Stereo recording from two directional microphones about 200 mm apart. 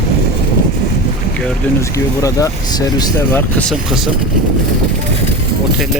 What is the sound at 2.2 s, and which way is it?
Speech, 20° left (ahead or behind).